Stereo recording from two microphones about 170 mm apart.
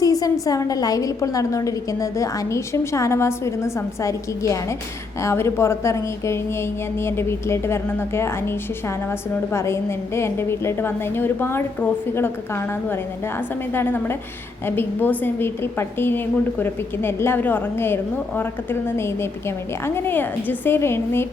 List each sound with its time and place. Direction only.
0.0 s a woman's voice: 20° left (ahead or behind)